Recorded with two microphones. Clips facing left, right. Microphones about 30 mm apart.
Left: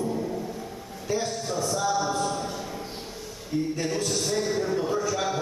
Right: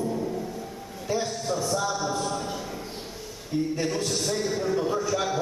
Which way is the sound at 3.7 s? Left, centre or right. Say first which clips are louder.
Even; centre.